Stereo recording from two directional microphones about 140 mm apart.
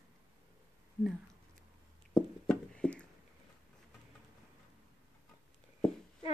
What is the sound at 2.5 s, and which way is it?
Clip-clop, 5° left (ahead or behind).